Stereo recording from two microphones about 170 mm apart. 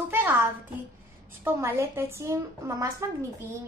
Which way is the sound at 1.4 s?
15° right (ahead or behind).